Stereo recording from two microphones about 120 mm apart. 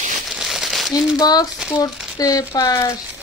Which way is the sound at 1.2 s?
35° left (ahead or behind).